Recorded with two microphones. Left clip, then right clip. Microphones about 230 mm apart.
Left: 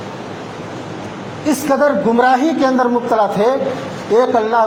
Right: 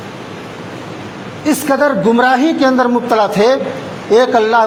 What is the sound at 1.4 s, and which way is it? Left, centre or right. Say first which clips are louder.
A man's voice: right 1 dB; right.